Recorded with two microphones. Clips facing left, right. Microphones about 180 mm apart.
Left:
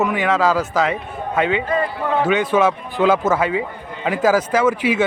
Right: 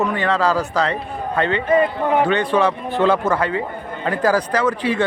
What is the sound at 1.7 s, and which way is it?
Speech, 20° right (ahead or behind).